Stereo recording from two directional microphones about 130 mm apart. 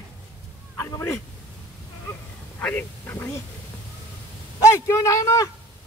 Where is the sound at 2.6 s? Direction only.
15° left (ahead or behind).